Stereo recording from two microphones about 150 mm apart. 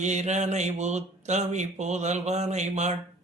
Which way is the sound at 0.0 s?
50° right (ahead or behind).